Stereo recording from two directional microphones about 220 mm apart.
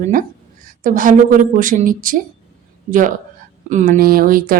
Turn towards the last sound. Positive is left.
turn(degrees=-40)  # may be behind; listen again after turning